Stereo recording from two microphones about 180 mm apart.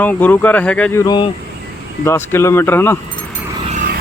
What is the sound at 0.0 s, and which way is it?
Speech, 10° left (ahead or behind).